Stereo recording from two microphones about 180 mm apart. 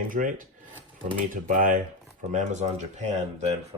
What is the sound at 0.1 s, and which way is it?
Speech, 45° right (ahead or behind).